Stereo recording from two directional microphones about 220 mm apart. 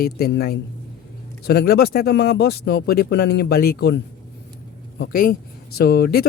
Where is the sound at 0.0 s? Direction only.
45° left (ahead or behind).